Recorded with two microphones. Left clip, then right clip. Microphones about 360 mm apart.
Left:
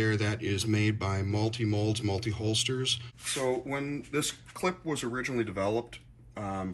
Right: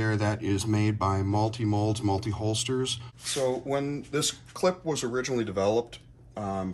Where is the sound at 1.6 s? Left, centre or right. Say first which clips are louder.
Right 2 dB; centre.